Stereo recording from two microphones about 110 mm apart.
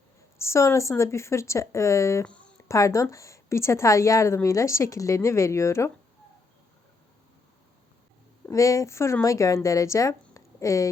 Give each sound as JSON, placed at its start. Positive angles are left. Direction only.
{"t": 0.3, "sound": "a woman's voice", "side_deg": 25}
{"t": 8.4, "sound": "a woman's voice", "side_deg": 30}